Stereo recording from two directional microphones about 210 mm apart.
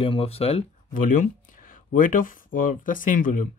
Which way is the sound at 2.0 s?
40° left (ahead or behind).